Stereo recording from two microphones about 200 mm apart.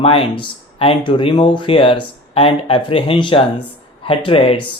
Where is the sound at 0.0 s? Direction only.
30° left (ahead or behind).